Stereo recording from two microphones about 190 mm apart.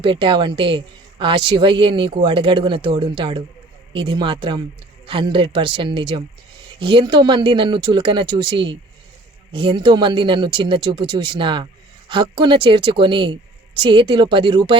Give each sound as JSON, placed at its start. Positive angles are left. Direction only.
{"t": 0.0, "sound": "speech", "side_deg": -25}